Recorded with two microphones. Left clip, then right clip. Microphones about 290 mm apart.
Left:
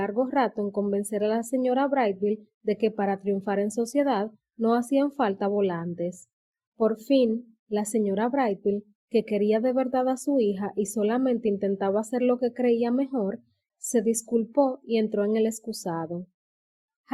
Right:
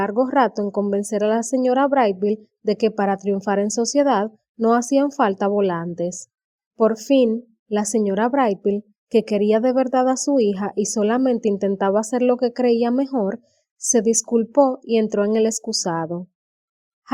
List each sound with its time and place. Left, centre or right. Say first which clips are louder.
0.0 s a woman's voice: right 7 dB; right